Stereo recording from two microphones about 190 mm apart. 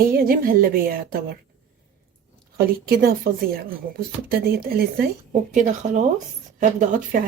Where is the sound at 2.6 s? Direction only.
55° right (ahead or behind).